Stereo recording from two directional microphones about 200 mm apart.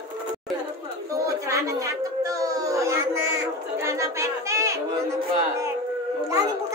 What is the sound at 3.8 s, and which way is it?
Chatter, 15° right (ahead or behind).